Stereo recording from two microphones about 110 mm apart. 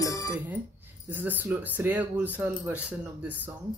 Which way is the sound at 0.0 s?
30° left (ahead or behind).